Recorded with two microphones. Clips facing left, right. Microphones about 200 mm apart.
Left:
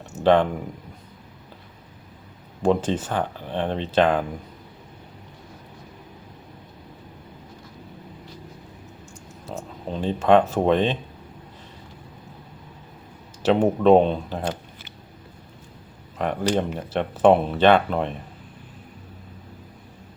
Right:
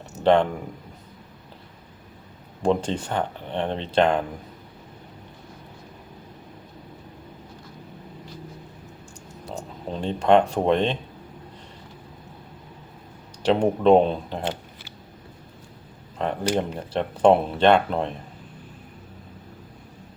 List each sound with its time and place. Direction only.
0.2 s speech: 5° left (ahead or behind)
2.6 s speech: 5° left (ahead or behind)
9.9 s speech: 5° left (ahead or behind)
13.4 s speech: 5° left (ahead or behind)
16.1 s speech: 5° left (ahead or behind)